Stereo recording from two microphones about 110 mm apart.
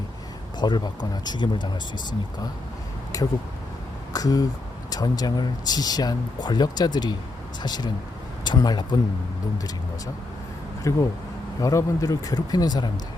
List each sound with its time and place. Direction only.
0.6 s speech: 40° left (ahead or behind)
3.1 s a sound: 35° left (ahead or behind)
4.1 s speech: 35° left (ahead or behind)
10.9 s speech: 30° left (ahead or behind)